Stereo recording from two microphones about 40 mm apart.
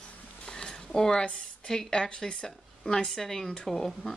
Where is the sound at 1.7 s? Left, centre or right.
Centre.